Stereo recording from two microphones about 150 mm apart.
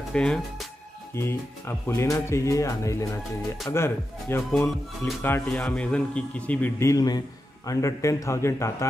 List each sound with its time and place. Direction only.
0.1 s speech: 5° left (ahead or behind)
1.1 s speech: 15° left (ahead or behind)